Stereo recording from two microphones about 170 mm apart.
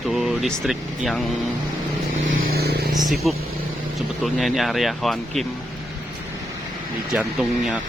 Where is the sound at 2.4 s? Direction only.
65° right (ahead or behind).